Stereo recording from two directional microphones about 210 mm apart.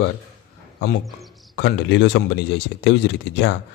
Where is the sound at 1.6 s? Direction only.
60° left (ahead or behind).